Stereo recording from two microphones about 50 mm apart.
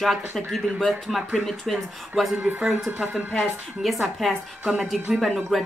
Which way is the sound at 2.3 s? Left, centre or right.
Right.